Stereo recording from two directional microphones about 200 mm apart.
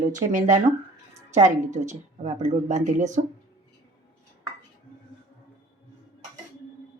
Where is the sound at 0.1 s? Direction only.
40° right (ahead or behind).